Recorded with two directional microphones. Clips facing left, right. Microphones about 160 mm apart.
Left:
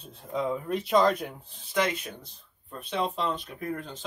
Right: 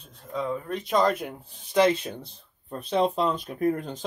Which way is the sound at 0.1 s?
20° left (ahead or behind).